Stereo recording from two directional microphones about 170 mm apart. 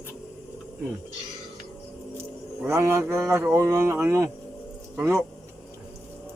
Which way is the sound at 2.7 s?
15° right (ahead or behind).